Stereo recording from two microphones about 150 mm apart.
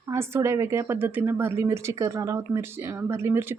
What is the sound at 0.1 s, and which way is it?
Speech, 15° right (ahead or behind).